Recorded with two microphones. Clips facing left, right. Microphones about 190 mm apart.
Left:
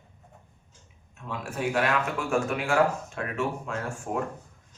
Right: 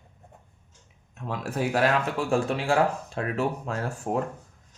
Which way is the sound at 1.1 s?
40° right (ahead or behind).